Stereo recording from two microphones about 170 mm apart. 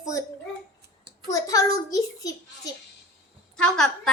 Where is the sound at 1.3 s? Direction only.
20° left (ahead or behind).